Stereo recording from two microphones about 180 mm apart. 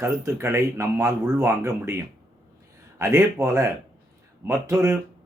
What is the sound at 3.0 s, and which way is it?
Speech, 15° right (ahead or behind).